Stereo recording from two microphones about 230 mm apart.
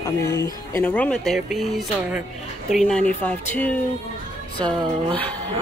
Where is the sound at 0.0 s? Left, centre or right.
Centre.